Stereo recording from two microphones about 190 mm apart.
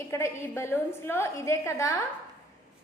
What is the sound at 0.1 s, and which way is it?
A woman's voice, 15° left (ahead or behind).